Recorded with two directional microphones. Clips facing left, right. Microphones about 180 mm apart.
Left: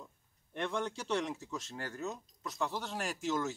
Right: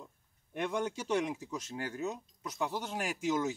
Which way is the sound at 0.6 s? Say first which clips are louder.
Right 2 dB; 10° right (ahead or behind).